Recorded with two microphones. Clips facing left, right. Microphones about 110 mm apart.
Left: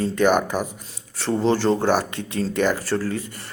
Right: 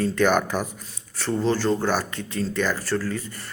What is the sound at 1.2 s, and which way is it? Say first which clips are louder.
Speech: left 3 dB; 20° left (ahead or behind).